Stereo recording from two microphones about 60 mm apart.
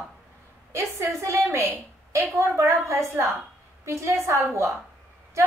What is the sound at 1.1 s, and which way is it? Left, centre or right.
A woman's voice, right.